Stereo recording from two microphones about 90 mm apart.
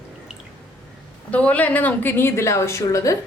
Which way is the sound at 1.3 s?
15° left (ahead or behind).